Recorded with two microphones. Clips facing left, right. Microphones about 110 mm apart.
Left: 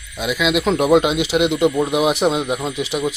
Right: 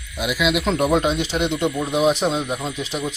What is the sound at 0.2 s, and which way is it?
Speech, 10° right (ahead or behind).